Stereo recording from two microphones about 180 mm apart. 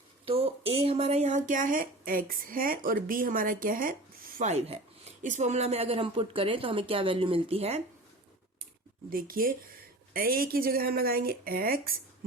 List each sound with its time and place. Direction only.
0.3 s speech: 30° right (ahead or behind)
9.0 s speech: 55° right (ahead or behind)